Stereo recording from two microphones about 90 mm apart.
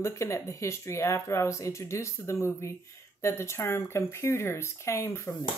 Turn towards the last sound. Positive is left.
turn(degrees=30)  # may be behind; listen again after turning